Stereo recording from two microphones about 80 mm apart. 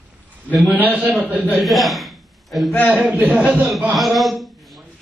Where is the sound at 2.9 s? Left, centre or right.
Centre.